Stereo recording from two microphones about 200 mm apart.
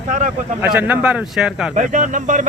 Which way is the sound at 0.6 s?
10° right (ahead or behind).